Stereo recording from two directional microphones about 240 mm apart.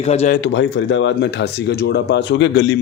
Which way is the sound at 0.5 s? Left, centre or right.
Left.